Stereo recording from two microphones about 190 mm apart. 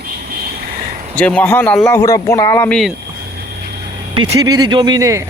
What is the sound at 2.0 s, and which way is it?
Speech, 20° left (ahead or behind).